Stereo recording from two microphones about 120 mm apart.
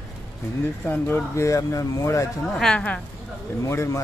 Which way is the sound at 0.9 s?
20° left (ahead or behind).